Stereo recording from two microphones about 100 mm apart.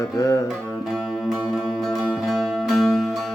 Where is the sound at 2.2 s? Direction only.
5° right (ahead or behind).